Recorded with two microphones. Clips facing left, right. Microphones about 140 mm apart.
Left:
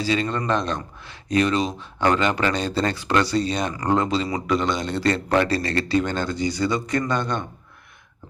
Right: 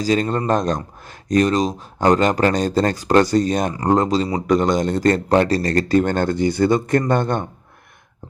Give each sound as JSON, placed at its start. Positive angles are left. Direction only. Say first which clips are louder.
{"t": 0.0, "sound": "speech", "louder": "right 4 dB", "side_deg": -45}
{"t": 3.8, "sound": "speech", "louder": "right 4 dB", "side_deg": -35}